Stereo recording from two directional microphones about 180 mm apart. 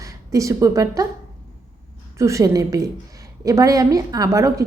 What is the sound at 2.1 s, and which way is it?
A woman's voice, 15° right (ahead or behind).